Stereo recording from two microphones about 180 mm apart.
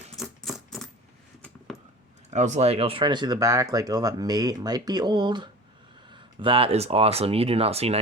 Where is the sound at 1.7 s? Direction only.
20° left (ahead or behind).